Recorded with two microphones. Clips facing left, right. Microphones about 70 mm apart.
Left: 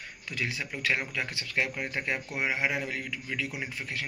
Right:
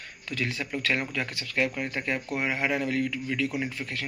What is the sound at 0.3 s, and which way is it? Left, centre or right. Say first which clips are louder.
Speech: right 3 dB; centre.